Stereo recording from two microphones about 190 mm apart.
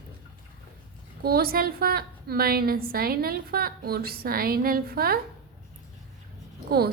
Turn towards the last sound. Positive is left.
turn(degrees=-55)  # may be behind; listen again after turning